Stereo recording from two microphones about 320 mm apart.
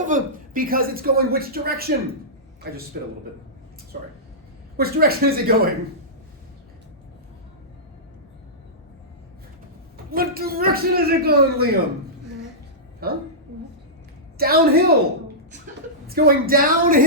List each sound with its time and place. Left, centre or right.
0.0 s speech: right
3.9 s speech: right
10.1 s speech: right
13.0 s speech: right
14.3 s speech: right
16.0 s speech: right